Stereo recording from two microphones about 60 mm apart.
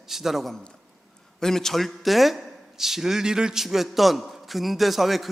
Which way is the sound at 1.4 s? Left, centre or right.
Centre.